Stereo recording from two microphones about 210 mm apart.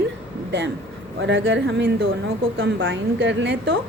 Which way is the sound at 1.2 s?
60° right (ahead or behind).